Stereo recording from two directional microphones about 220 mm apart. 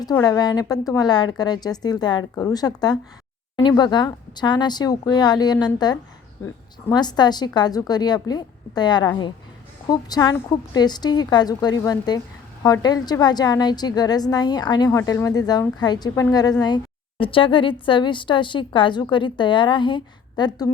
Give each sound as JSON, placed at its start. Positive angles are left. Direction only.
{"t": 0.0, "sound": "a woman's voice", "side_deg": 15}